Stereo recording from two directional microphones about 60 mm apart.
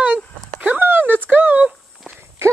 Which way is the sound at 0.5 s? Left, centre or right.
Right.